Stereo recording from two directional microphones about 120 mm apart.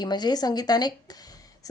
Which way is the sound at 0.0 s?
35° left (ahead or behind).